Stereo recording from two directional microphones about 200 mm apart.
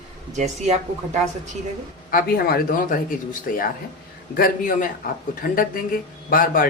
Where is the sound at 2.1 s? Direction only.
50° left (ahead or behind).